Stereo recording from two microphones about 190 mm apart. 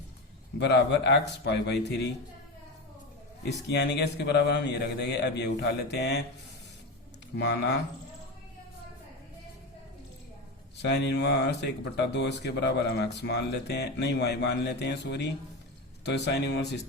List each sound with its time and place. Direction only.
0.6 s speech: 65° left (ahead or behind)
3.7 s speech: 60° left (ahead or behind)
7.3 s speech: 60° left (ahead or behind)
10.8 s speech: 65° left (ahead or behind)